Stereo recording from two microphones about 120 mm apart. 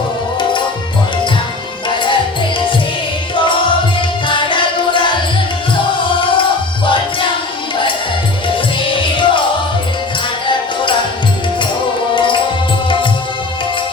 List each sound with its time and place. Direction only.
4.3 s music: 40° left (ahead or behind)
8.9 s music: 45° left (ahead or behind)
10.4 s music: 40° left (ahead or behind)